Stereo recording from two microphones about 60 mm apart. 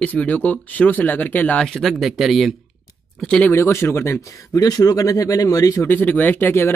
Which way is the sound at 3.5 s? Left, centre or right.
Left.